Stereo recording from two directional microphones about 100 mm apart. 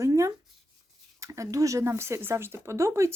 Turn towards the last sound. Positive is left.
turn(degrees=-30)  # may be behind; listen again after turning